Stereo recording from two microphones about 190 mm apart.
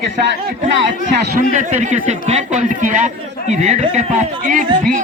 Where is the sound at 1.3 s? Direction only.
40° right (ahead or behind).